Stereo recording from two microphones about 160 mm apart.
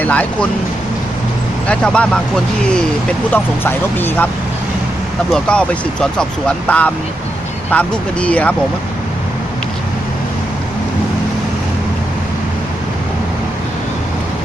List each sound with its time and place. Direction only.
0.0 s speech: 10° left (ahead or behind)
1.6 s speech: 5° left (ahead or behind)
5.3 s speech: 5° left (ahead or behind)